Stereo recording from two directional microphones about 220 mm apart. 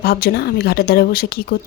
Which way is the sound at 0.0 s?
45° left (ahead or behind).